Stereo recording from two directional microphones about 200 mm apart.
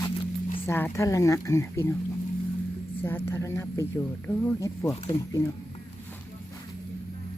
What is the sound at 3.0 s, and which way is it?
Speech, 10° left (ahead or behind).